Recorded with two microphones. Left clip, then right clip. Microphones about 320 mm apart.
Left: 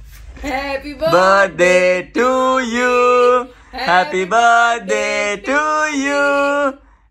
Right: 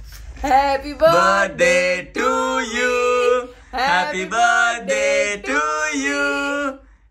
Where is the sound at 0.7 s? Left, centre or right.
Centre.